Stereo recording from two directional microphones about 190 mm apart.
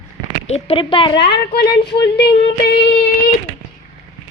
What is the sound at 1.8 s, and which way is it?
Speech, 60° left (ahead or behind).